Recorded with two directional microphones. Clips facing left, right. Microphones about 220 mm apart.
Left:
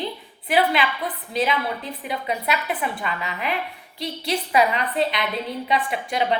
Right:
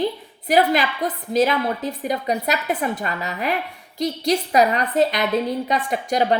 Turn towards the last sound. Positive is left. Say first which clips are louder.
# right 4 dB
turn(degrees=-45)  # may be behind; listen again after turning